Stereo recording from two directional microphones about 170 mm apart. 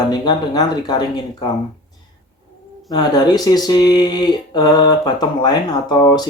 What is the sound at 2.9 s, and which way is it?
Speech, 25° left (ahead or behind).